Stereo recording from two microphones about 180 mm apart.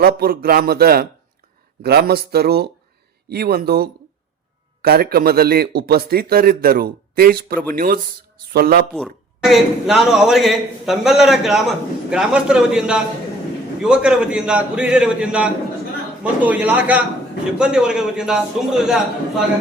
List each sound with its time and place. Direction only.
0.0 s a man's voice: 55° right (ahead or behind)
8.9 s a man's voice: centre (ahead or behind)